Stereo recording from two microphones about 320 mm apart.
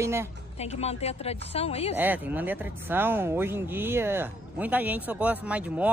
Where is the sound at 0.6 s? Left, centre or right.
Centre.